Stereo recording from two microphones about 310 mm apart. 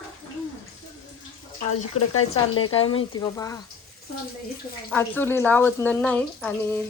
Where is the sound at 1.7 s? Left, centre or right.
Left.